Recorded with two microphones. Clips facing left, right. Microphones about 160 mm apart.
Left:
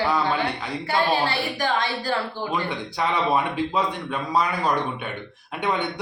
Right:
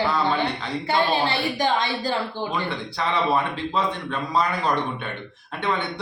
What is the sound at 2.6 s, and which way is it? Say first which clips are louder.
Speech: left 1 dB; 15° left (ahead or behind).